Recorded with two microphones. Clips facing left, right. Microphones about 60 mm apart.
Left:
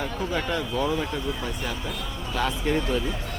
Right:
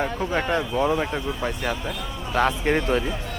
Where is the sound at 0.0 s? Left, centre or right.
Right.